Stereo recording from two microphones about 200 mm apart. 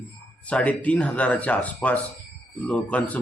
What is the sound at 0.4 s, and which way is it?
A man's voice, 5° left (ahead or behind).